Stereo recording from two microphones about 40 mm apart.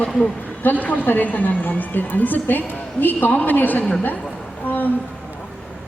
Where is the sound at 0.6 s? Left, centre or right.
Left.